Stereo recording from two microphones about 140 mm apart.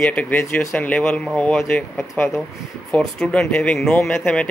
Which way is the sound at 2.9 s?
5° left (ahead or behind).